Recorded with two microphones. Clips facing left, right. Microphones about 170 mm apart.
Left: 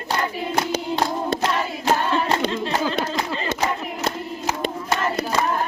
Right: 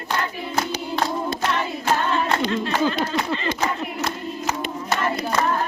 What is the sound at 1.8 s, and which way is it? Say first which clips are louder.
Singing: left 2 dB; 35° left (ahead or behind).